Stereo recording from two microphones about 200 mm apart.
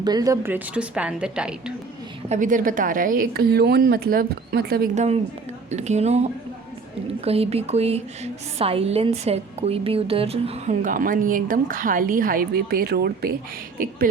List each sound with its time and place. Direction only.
0.0 s a woman's voice: 20° right (ahead or behind)
2.3 s a woman's voice: 40° right (ahead or behind)
4.9 s a woman's voice: 30° right (ahead or behind)
7.3 s a woman's voice: 30° right (ahead or behind)
10.9 s a woman's voice: 40° right (ahead or behind)